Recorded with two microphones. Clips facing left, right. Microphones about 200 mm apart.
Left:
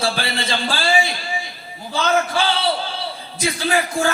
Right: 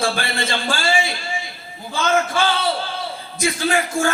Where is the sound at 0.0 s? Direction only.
50° right (ahead or behind).